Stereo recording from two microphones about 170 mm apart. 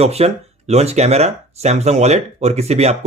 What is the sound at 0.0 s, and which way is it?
Speech, 40° right (ahead or behind).